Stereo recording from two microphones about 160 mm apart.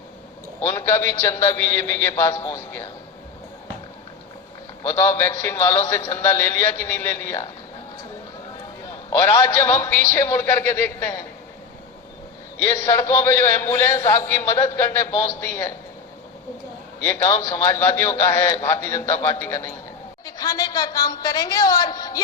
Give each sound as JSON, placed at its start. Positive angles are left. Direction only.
{"t": 0.6, "sound": "a man's voice", "side_deg": 20}
{"t": 4.8, "sound": "a man's voice", "side_deg": 15}
{"t": 8.9, "sound": "a man's voice", "side_deg": 25}
{"t": 12.6, "sound": "a man's voice", "side_deg": 15}
{"t": 17.0, "sound": "a man's voice", "side_deg": 15}